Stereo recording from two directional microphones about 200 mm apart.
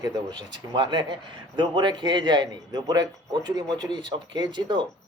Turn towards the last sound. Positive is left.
turn(degrees=-25)  # may be behind; listen again after turning